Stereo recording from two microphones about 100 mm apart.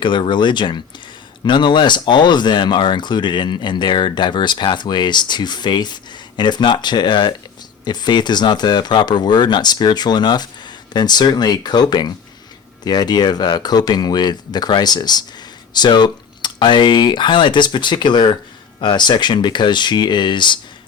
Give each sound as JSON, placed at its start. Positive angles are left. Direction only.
{"t": 0.0, "sound": "speech", "side_deg": 50}